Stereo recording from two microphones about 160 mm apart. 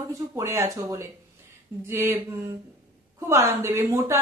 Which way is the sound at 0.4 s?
15° right (ahead or behind).